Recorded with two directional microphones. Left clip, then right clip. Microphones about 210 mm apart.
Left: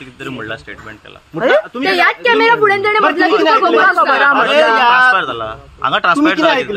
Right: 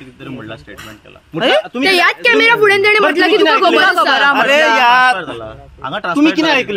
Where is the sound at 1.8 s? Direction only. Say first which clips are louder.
Right 1 dB; 55° right (ahead or behind).